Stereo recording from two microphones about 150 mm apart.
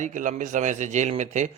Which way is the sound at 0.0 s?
55° right (ahead or behind).